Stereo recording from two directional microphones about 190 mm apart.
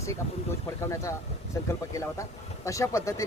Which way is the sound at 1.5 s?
15° left (ahead or behind).